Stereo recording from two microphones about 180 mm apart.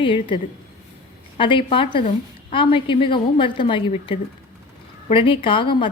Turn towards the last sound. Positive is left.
turn(degrees=30)  # may be behind; listen again after turning